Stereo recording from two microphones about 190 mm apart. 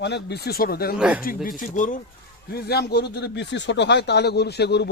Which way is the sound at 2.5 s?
55° left (ahead or behind).